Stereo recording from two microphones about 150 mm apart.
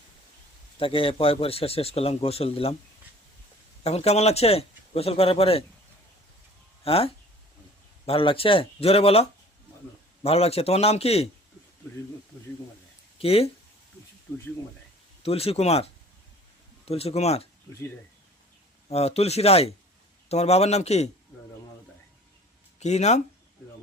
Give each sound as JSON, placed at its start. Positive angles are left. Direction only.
{"t": 0.8, "sound": "speech", "side_deg": 35}
{"t": 3.8, "sound": "speech", "side_deg": 45}
{"t": 6.8, "sound": "speech", "side_deg": 40}
{"t": 10.2, "sound": "a man's voice", "side_deg": 40}
{"t": 13.1, "sound": "speech", "side_deg": 40}
{"t": 15.2, "sound": "a man's voice", "side_deg": 40}
{"t": 18.9, "sound": "a man's voice", "side_deg": 45}
{"t": 22.8, "sound": "a man's voice", "side_deg": 50}